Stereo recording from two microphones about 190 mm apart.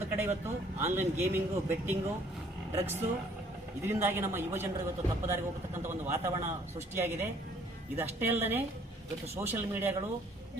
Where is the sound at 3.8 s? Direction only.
15° right (ahead or behind).